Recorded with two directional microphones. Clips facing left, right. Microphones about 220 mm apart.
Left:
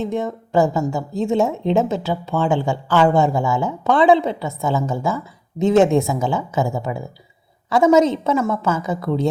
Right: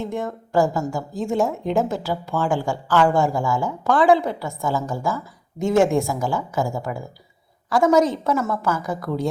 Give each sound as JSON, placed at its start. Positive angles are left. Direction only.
{"t": 0.0, "sound": "a woman's voice", "side_deg": 20}